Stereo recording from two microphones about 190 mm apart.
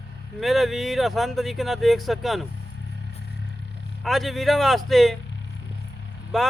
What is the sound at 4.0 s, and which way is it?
Speech, centre (ahead or behind).